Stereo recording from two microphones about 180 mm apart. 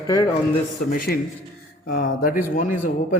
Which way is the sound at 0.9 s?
50° left (ahead or behind).